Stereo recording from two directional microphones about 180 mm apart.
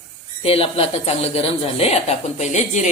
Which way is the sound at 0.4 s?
35° left (ahead or behind).